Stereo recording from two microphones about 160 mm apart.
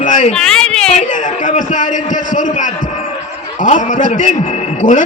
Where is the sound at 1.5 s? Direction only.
50° left (ahead or behind).